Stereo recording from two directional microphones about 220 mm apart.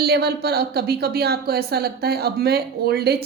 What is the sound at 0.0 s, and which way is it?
Speech, 45° right (ahead or behind).